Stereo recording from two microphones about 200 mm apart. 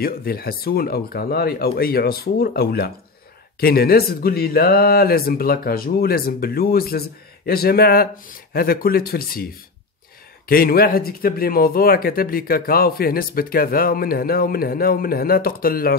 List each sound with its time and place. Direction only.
0.0 s speech: 50° left (ahead or behind)
10.5 s speech: 50° left (ahead or behind)